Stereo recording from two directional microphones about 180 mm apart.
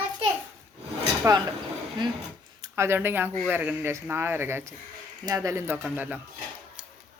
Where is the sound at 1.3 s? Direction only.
15° right (ahead or behind).